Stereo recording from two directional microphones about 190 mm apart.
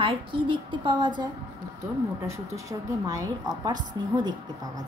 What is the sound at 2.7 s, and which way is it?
A woman's voice, 15° right (ahead or behind).